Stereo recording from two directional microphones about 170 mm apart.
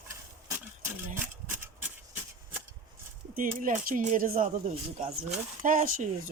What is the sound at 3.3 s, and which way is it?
Speech, 55° right (ahead or behind).